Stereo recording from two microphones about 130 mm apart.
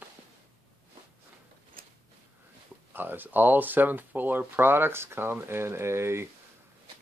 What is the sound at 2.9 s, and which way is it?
Speech, 15° right (ahead or behind).